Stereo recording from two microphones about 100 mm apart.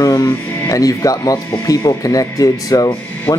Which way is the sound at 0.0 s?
40° left (ahead or behind).